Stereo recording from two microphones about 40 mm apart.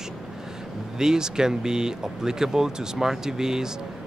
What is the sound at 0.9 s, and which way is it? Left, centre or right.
Speech, centre.